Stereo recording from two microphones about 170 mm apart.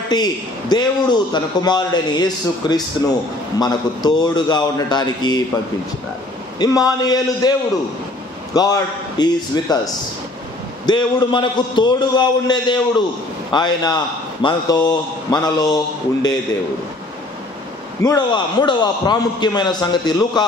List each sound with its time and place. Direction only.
0.1 s a man's voice: 25° left (ahead or behind)
6.6 s a man's voice: 20° left (ahead or behind)
8.5 s a man's voice: 20° left (ahead or behind)
10.9 s a man's voice: 25° left (ahead or behind)
18.0 s a man's voice: 25° left (ahead or behind)